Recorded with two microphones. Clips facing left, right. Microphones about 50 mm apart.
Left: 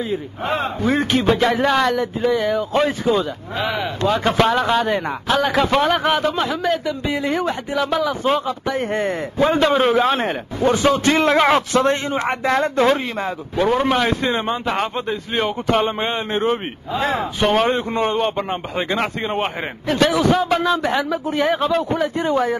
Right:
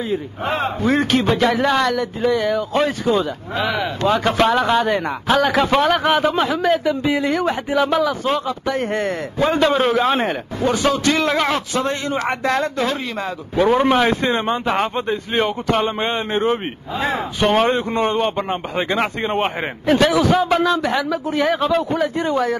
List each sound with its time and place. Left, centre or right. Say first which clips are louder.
0.1 s a man's voice: right 1 dB; centre
8.3 s a man's voice: left 1 dB; centre
10.6 s a man's voice: left 2 dB; left
11.7 s speech: left 4 dB; left
12.3 s a man's voice: left 1 dB; centre
12.6 s speech: left 5 dB; left
13.6 s a man's voice: right 3 dB; centre